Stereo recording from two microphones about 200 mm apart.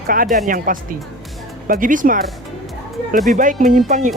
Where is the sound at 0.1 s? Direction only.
45° right (ahead or behind).